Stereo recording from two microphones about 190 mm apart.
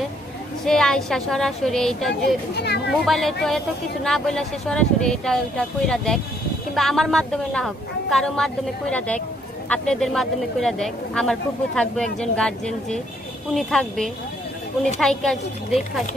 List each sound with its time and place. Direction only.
0.7 s speech: 5° left (ahead or behind)
2.5 s a child's voice: 60° left (ahead or behind)
2.9 s speech: centre (ahead or behind)